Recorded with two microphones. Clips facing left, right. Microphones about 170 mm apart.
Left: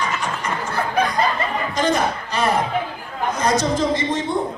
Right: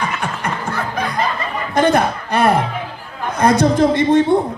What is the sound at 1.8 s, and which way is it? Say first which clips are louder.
A man's voice: right 6 dB; 60° right (ahead or behind).